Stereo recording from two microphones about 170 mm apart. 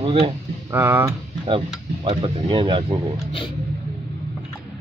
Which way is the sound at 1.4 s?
35° right (ahead or behind).